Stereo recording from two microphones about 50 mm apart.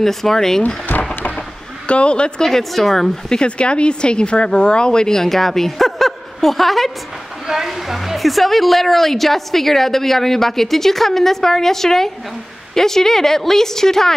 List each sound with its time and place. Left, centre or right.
0.0 s speech: centre
1.9 s speech: left; by 3.3 s centre
3.3 s a woman's voice: left